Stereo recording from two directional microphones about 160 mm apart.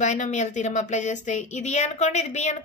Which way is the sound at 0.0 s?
50° left (ahead or behind).